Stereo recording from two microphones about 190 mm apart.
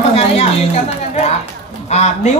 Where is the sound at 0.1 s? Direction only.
30° left (ahead or behind).